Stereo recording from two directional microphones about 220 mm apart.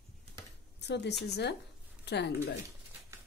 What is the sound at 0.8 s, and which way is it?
A woman's voice, 50° left (ahead or behind).